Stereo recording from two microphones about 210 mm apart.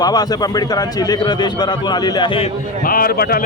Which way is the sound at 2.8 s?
45° left (ahead or behind).